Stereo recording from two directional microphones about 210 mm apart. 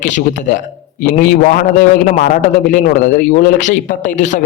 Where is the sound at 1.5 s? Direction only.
40° left (ahead or behind).